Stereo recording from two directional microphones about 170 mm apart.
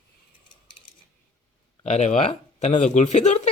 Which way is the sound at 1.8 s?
40° left (ahead or behind).